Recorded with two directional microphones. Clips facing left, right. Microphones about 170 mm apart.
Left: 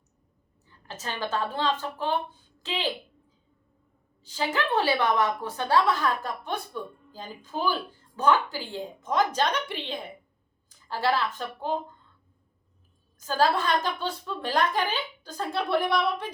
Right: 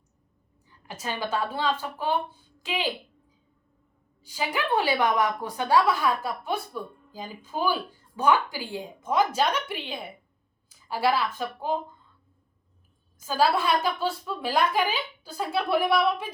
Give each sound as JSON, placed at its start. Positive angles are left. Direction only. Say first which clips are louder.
{"t": 0.9, "sound": "a woman's voice", "louder": "right 1 dB", "side_deg": -10}
{"t": 4.2, "sound": "a woman's voice", "louder": "left 1 dB", "side_deg": -10}
{"t": 13.1, "sound": "a woman's voice", "louder": "right 1 dB", "side_deg": -10}